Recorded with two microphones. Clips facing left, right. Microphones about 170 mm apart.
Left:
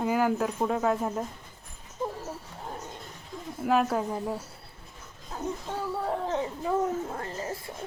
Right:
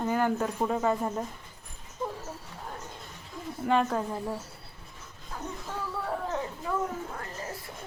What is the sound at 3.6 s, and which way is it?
Speech, 5° left (ahead or behind).